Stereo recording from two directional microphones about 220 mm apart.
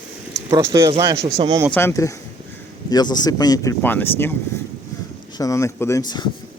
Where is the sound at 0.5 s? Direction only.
15° right (ahead or behind).